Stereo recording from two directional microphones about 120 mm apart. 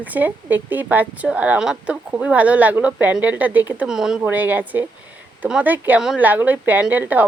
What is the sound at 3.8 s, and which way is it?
A woman's voice, 5° right (ahead or behind).